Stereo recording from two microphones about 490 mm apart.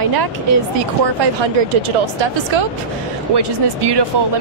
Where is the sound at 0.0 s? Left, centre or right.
Right.